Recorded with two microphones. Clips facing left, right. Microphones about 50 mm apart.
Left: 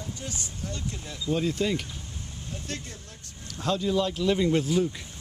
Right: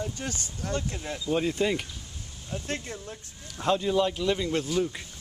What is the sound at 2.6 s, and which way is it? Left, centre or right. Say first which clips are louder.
Speech: right 4 dB; right.